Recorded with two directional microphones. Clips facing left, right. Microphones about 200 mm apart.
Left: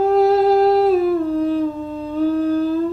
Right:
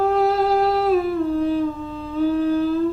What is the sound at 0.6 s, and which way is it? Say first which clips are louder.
Humming: left 4 dB; 40° left (ahead or behind).